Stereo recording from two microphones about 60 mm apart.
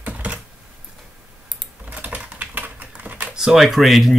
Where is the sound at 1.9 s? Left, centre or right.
Right.